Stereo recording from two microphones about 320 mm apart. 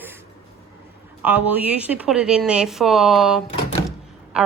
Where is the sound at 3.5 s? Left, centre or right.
Centre.